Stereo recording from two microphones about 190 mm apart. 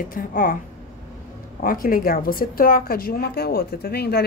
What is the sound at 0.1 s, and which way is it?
Speech, 50° left (ahead or behind).